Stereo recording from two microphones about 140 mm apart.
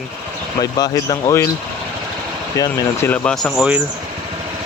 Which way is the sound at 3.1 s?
5° left (ahead or behind).